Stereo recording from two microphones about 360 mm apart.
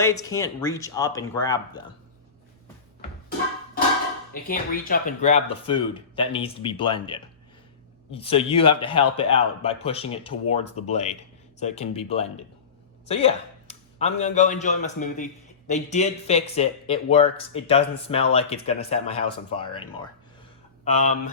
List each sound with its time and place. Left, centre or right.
0.0 s speech: centre
4.4 s a man's voice: left
20.8 s a man's voice: centre